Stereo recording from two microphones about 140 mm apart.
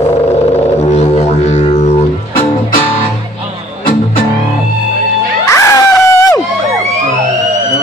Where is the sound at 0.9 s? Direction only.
50° left (ahead or behind).